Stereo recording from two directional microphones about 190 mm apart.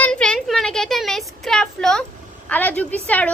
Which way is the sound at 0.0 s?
5° left (ahead or behind).